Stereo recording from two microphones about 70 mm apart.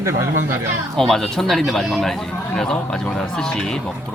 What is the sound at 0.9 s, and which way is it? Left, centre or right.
Speech, centre.